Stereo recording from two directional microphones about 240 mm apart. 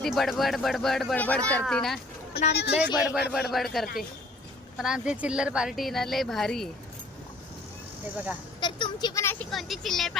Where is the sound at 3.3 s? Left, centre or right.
Centre.